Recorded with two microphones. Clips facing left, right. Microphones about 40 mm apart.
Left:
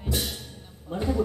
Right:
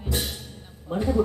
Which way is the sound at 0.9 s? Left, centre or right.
Right.